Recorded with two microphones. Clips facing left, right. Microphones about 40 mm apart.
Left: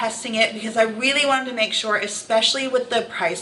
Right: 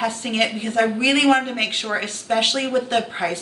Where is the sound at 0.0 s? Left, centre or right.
Centre.